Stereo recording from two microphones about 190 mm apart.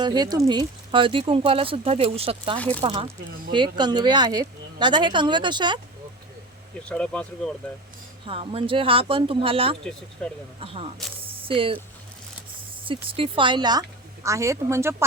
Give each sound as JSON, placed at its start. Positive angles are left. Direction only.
{"t": 0.0, "sound": "speech", "side_deg": -20}
{"t": 6.8, "sound": "speech", "side_deg": 5}
{"t": 8.3, "sound": "speech", "side_deg": -30}
{"t": 10.2, "sound": "speech", "side_deg": 5}
{"t": 10.6, "sound": "speech", "side_deg": -30}
{"t": 13.1, "sound": "speech", "side_deg": -30}